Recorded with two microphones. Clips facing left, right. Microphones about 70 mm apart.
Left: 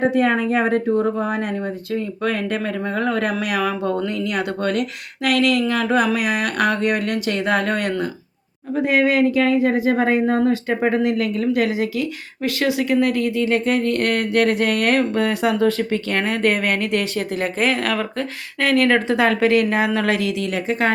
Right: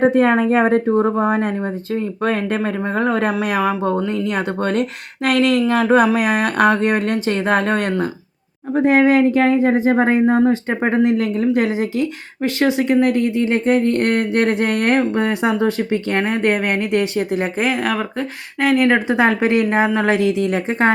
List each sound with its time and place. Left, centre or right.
0.0 s speech: right
10.2 s speech: right
10.7 s speech: right